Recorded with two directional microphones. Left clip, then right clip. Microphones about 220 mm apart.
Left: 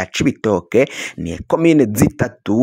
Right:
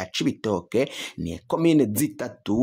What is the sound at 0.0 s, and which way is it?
Speech, 30° left (ahead or behind).